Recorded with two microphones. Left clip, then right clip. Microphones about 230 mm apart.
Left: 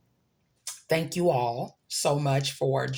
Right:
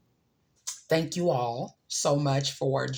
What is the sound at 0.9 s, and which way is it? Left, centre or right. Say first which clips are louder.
Speech: left 1 dB; left.